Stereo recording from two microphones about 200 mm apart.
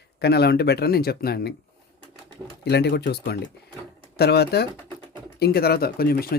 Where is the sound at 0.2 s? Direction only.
55° left (ahead or behind).